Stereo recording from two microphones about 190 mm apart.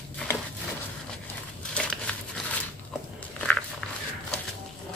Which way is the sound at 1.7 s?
5° left (ahead or behind).